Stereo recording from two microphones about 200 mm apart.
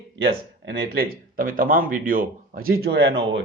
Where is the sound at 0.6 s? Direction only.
50° right (ahead or behind).